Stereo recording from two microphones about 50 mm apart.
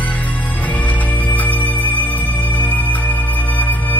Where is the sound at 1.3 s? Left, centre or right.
Left.